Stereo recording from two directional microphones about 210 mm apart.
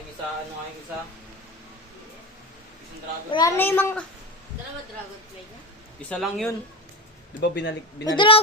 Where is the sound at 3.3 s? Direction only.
15° left (ahead or behind).